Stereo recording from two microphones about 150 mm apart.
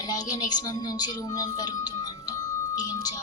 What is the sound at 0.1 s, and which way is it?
A woman's voice, 25° left (ahead or behind).